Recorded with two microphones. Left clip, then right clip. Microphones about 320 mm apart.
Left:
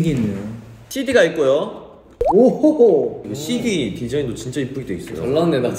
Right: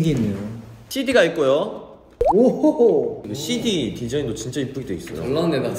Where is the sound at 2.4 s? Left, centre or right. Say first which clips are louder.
Left 3 dB; right.